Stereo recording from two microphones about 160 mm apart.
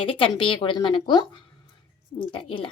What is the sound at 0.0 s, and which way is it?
A woman's voice, 35° left (ahead or behind).